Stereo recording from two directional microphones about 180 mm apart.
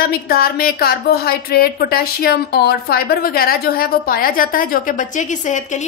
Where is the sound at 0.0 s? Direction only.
55° left (ahead or behind).